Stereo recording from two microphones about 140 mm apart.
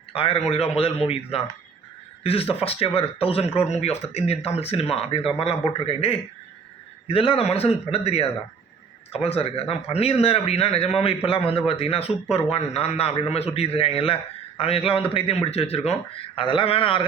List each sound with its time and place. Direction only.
0.1 s a man's voice: 40° left (ahead or behind)